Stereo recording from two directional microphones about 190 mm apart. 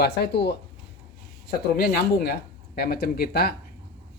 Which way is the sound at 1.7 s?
50° left (ahead or behind).